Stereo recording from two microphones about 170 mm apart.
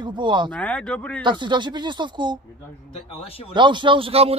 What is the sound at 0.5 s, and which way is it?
Speech, 10° left (ahead or behind).